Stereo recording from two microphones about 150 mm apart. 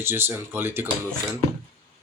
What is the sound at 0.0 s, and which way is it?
Speech, 15° right (ahead or behind).